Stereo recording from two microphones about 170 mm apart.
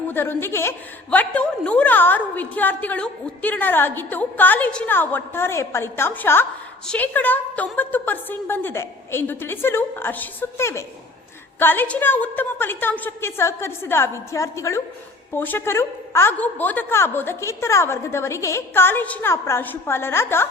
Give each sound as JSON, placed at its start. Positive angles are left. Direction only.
{"t": 0.1, "sound": "a woman's voice", "side_deg": 15}